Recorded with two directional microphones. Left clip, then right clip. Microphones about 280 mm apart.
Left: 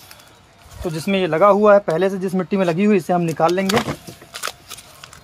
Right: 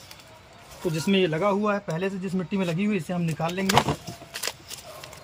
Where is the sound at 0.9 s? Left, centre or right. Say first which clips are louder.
Left 6 dB; centre.